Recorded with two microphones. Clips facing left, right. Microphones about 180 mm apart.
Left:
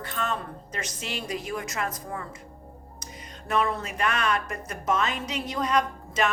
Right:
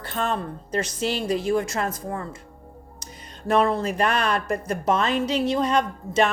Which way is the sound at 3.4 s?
30° right (ahead or behind).